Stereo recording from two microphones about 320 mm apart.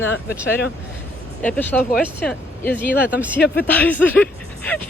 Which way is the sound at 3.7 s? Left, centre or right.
Centre.